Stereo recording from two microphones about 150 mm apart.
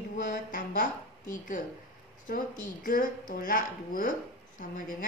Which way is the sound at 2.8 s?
70° left (ahead or behind).